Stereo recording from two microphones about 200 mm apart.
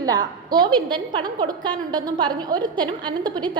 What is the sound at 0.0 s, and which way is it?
A woman's voice, 20° right (ahead or behind).